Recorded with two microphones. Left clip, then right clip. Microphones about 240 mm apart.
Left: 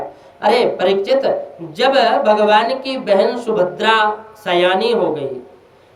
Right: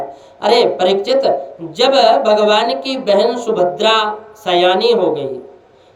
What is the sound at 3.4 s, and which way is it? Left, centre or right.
Speech, centre.